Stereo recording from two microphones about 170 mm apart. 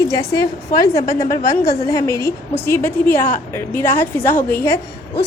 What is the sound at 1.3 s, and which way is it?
A woman's voice, 20° left (ahead or behind).